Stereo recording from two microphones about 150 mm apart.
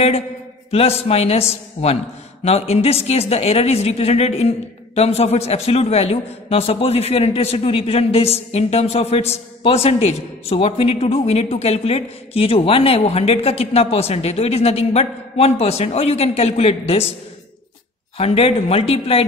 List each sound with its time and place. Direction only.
0.7 s a woman's voice: 40° left (ahead or behind)
18.1 s speech: 40° left (ahead or behind)